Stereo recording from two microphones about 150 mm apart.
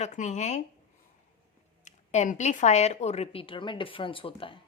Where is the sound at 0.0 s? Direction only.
50° left (ahead or behind).